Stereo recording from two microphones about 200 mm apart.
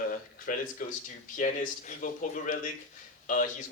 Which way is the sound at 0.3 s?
40° left (ahead or behind).